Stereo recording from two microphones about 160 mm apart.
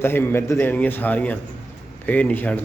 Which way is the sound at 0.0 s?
15° left (ahead or behind).